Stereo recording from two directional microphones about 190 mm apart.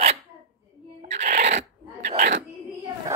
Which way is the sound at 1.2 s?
35° right (ahead or behind).